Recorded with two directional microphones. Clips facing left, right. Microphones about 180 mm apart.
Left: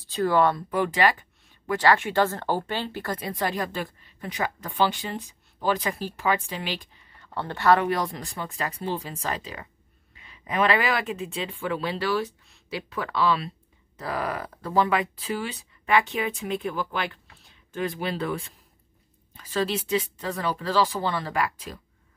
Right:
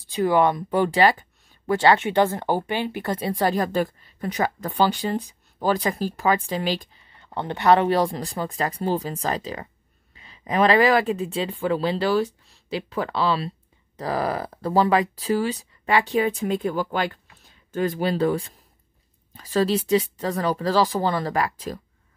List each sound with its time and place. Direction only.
0.1 s speech: 15° right (ahead or behind)
0.7 s speech: 30° right (ahead or behind)
7.2 s speech: 20° right (ahead or behind); by 21.7 s 40° right (ahead or behind)